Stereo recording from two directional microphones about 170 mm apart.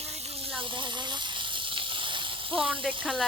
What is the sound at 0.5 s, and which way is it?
Snake, 30° right (ahead or behind).